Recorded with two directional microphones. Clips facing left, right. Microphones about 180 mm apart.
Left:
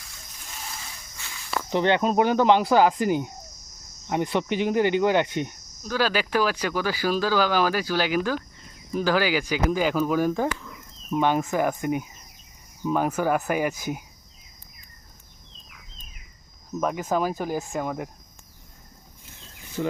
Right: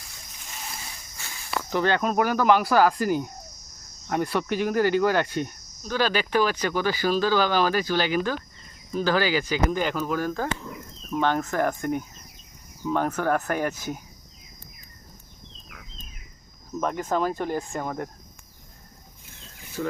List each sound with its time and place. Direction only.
1.7 s speech: 25° left (ahead or behind)
5.9 s speech: 5° left (ahead or behind)
16.8 s speech: 5° left (ahead or behind)
19.8 s speech: 20° left (ahead or behind)